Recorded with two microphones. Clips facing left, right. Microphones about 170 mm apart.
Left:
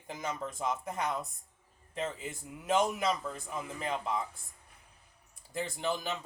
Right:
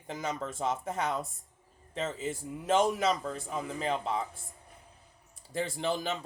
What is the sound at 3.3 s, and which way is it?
Speech, 30° right (ahead or behind).